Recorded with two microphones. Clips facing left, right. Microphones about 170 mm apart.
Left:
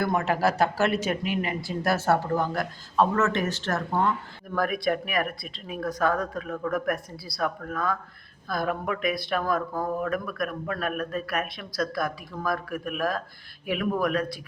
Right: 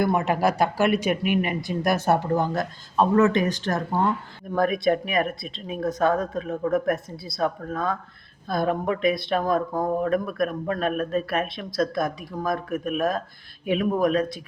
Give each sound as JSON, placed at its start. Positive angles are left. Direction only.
{"t": 0.0, "sound": "speech", "side_deg": -15}